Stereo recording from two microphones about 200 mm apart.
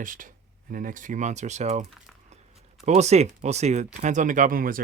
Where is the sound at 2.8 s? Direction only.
35° right (ahead or behind).